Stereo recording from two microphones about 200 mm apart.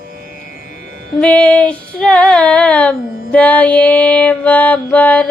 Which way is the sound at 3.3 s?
5° left (ahead or behind).